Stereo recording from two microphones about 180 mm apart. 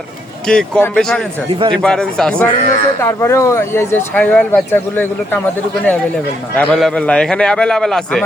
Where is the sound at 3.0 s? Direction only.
15° left (ahead or behind).